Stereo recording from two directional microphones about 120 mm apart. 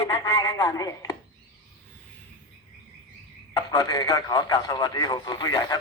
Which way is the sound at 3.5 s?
30° left (ahead or behind).